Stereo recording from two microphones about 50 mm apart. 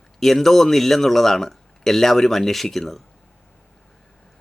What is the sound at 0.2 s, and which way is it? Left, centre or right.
Speech, centre.